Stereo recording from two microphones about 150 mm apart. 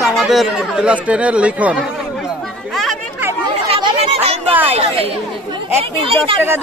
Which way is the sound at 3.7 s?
30° right (ahead or behind).